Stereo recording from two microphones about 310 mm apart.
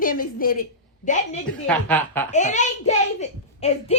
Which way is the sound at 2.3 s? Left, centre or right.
Left.